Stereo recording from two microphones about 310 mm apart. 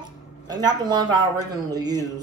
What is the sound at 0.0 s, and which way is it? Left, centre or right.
Speech, centre.